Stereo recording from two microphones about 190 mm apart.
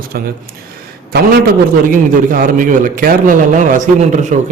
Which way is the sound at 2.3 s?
45° right (ahead or behind).